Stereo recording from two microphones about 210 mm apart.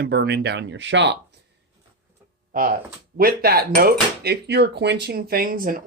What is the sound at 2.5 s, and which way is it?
Speech, 40° right (ahead or behind).